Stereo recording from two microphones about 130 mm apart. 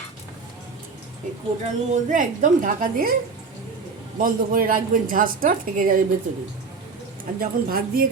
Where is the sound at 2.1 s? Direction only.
85° right.